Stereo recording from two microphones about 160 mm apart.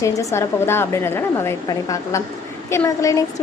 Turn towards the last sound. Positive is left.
turn(degrees=20)  # may be behind; listen again after turning